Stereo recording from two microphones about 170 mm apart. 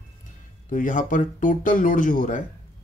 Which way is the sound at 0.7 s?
50° left (ahead or behind).